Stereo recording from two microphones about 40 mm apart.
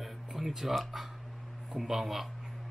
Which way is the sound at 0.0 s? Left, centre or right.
Centre.